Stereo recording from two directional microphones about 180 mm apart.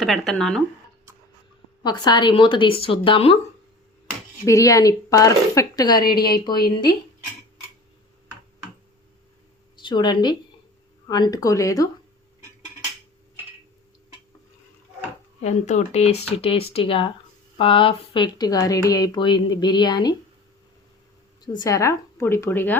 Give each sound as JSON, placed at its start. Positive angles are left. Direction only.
{"t": 0.0, "sound": "speech", "side_deg": 0}
{"t": 1.8, "sound": "speech", "side_deg": 25}
{"t": 4.4, "sound": "speech", "side_deg": 20}
{"t": 9.8, "sound": "speech", "side_deg": 25}
{"t": 15.4, "sound": "speech", "side_deg": 40}
{"t": 21.4, "sound": "speech", "side_deg": 20}